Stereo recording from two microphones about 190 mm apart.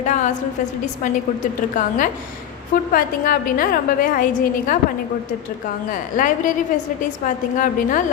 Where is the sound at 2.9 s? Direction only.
50° left (ahead or behind).